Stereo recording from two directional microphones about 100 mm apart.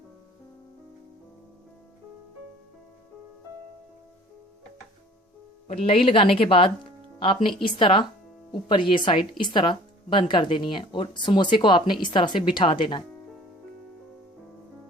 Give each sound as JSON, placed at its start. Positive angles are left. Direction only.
{"t": 5.6, "sound": "speech", "side_deg": 80}